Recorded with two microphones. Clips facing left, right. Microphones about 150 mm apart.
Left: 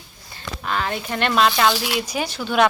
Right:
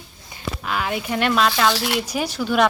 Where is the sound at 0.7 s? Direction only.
5° right (ahead or behind).